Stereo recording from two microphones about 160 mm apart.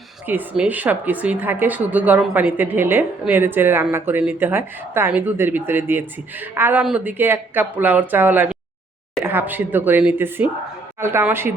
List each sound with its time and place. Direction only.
0.3 s a woman's voice: 10° right (ahead or behind)